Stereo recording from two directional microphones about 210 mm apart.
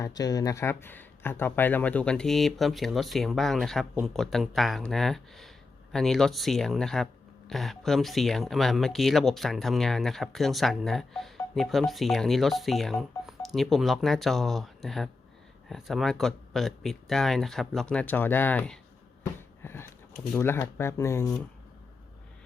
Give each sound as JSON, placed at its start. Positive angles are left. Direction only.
{"t": 0.0, "sound": "speech", "side_deg": 15}